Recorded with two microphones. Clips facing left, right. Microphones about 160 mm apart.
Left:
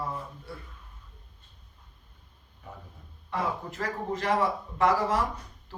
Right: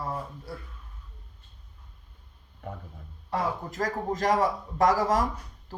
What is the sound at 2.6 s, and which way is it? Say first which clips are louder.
Speech: right 6 dB; 55° right (ahead or behind).